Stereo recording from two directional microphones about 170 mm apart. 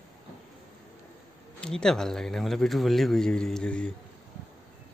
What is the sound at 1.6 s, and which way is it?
A man's voice, 5° left (ahead or behind).